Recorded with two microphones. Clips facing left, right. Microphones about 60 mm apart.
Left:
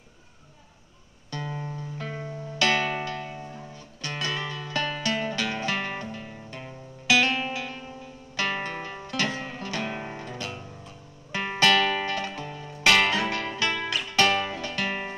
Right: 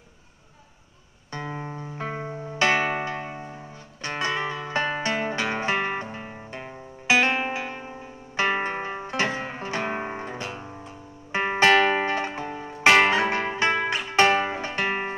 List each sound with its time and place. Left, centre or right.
1.3 s music: right